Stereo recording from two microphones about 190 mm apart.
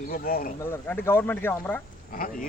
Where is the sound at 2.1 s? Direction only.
45° left (ahead or behind).